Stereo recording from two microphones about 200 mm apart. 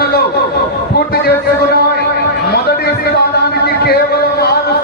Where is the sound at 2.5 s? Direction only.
50° left (ahead or behind).